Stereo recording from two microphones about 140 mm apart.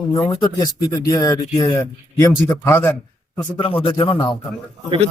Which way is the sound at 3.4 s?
40° left (ahead or behind).